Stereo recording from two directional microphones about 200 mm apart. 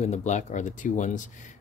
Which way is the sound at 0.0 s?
35° left (ahead or behind).